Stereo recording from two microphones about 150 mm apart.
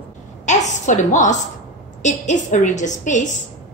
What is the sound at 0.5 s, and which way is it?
A woman's voice, 55° left (ahead or behind).